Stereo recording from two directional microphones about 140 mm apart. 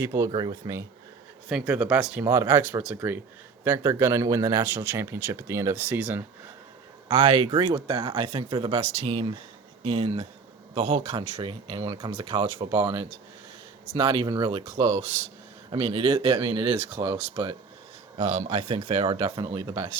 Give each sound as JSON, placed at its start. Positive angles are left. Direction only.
{"t": 0.0, "sound": "speech", "side_deg": -20}
{"t": 0.3, "sound": "speech", "side_deg": -35}
{"t": 1.5, "sound": "speech", "side_deg": -10}
{"t": 2.2, "sound": "speech", "side_deg": -20}
{"t": 7.1, "sound": "speech", "side_deg": -45}
{"t": 18.2, "sound": "speech", "side_deg": -55}
{"t": 18.4, "sound": "speech", "side_deg": -45}